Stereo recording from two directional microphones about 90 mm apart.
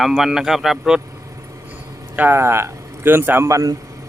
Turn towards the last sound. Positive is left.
turn(degrees=-40)  # may be behind; listen again after turning